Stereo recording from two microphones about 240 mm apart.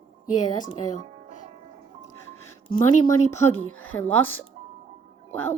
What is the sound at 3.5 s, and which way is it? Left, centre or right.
Speech, left.